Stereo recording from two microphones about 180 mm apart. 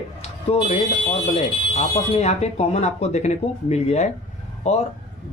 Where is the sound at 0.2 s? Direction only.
35° left (ahead or behind).